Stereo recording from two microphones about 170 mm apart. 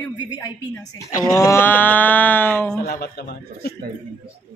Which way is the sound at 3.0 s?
70° left (ahead or behind).